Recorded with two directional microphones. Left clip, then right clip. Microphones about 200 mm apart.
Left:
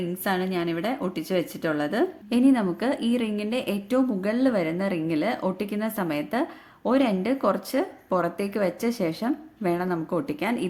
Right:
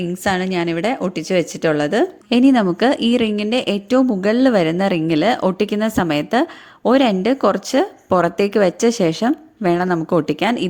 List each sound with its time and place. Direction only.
0.3 s a woman's voice: 35° right (ahead or behind)